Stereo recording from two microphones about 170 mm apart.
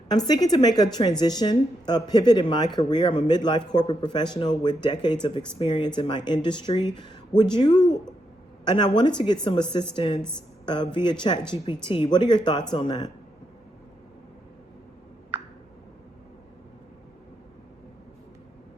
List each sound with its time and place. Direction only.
0.3 s speech: 25° left (ahead or behind)